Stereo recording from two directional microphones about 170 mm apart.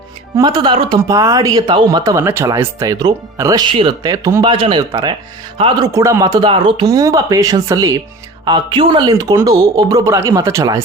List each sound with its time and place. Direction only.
0.3 s speech: 25° right (ahead or behind)
5.5 s speech: 30° right (ahead or behind)
5.9 s speech: 15° right (ahead or behind)